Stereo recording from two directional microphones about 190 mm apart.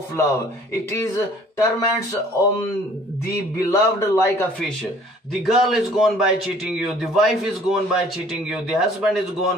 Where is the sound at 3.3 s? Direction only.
15° left (ahead or behind).